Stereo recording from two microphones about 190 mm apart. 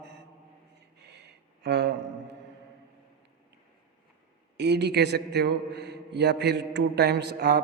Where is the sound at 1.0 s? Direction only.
60° right (ahead or behind).